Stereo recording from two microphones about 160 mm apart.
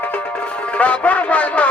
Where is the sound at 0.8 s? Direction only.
10° left (ahead or behind).